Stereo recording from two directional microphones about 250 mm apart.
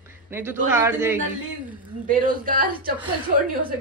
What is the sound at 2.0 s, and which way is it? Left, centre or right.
Speech, right.